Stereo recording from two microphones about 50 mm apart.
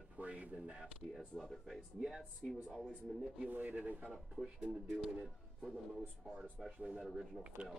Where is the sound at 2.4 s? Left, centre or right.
Centre.